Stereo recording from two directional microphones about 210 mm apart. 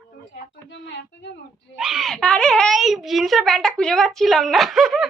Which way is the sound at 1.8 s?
Centre (ahead or behind).